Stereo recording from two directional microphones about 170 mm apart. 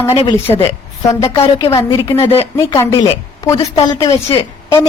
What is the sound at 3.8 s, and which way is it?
Speech, 30° left (ahead or behind).